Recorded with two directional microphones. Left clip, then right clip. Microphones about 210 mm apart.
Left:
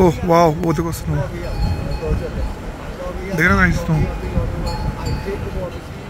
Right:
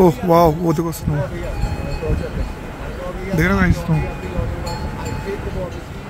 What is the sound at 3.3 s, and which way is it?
Speech, 15° right (ahead or behind).